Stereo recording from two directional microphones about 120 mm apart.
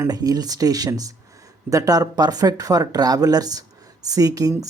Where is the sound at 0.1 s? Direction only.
35° right (ahead or behind).